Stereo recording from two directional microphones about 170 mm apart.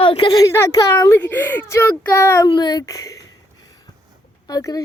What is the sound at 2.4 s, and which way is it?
Speech, 25° left (ahead or behind).